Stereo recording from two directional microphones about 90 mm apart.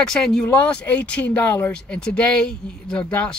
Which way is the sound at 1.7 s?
10° left (ahead or behind).